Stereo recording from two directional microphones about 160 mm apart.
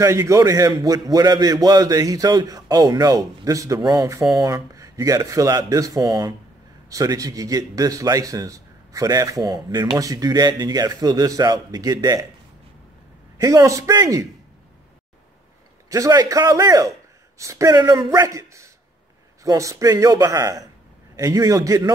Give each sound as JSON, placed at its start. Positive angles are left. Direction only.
{"t": 0.0, "sound": "a man's voice", "side_deg": -20}
{"t": 13.4, "sound": "a man's voice", "side_deg": -20}
{"t": 15.9, "sound": "a man's voice", "side_deg": -25}